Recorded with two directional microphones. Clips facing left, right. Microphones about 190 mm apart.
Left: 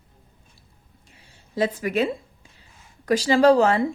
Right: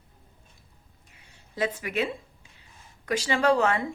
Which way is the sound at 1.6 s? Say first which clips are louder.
Left 6 dB; 40° left (ahead or behind).